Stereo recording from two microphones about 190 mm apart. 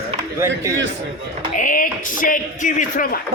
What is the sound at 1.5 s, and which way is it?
Speech, 45° left (ahead or behind).